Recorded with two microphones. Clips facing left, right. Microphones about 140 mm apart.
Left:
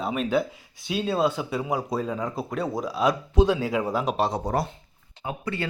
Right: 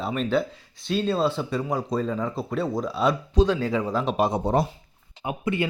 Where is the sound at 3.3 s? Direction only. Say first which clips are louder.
Left 1 dB; 20° left (ahead or behind).